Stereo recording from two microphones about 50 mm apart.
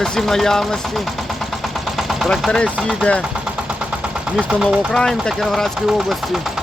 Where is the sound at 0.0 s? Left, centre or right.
Centre.